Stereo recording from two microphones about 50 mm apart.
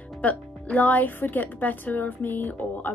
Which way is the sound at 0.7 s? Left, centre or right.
Left.